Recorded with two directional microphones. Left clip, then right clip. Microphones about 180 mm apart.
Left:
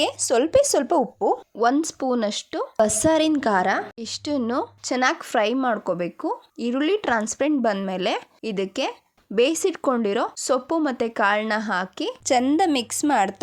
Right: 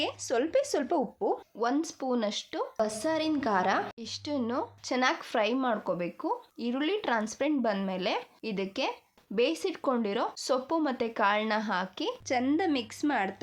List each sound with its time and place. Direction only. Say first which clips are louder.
0.0 s speech: left 9 dB; 40° left (ahead or behind)
1.6 s speech: left 9 dB; 40° left (ahead or behind)
4.0 s speech: left 7 dB; 45° left (ahead or behind)